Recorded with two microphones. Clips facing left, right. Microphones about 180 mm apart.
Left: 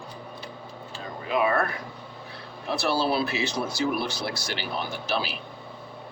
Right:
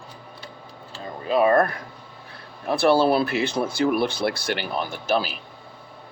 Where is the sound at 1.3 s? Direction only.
40° right (ahead or behind).